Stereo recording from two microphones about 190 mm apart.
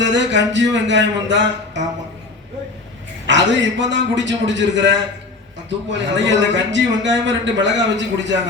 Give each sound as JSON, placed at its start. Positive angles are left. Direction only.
{"t": 0.0, "sound": "a man's voice", "side_deg": -70}
{"t": 3.2, "sound": "a man's voice", "side_deg": -70}